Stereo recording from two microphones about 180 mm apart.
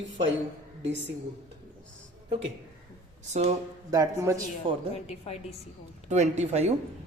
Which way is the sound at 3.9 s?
20° right (ahead or behind).